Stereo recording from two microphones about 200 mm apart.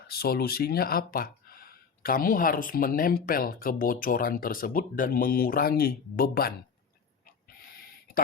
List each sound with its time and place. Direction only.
0.1 s speech: 50° left (ahead or behind)